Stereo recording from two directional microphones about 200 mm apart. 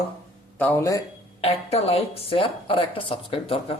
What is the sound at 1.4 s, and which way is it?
A woman's voice, 30° left (ahead or behind).